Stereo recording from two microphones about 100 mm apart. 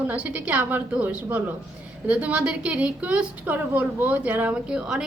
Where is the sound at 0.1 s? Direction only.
15° right (ahead or behind).